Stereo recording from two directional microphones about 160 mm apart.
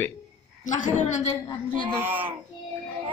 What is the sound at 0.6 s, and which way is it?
Speech, 50° left (ahead or behind).